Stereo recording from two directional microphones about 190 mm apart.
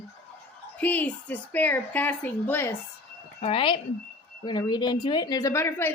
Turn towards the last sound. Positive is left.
turn(degrees=10)  # may be behind; listen again after turning